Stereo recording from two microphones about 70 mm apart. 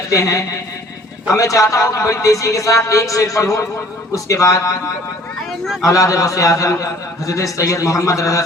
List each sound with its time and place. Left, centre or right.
0.1 s a man's voice: left
5.8 s a man's voice: left